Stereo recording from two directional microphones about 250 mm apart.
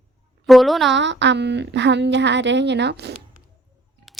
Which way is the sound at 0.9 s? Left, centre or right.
Right.